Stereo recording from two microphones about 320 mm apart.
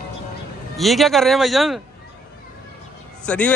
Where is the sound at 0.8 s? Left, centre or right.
Centre.